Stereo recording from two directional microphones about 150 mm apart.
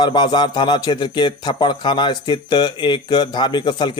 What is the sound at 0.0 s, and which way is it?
A man's voice, 30° left (ahead or behind).